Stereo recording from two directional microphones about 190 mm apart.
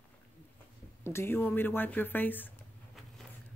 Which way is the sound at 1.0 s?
15° left (ahead or behind).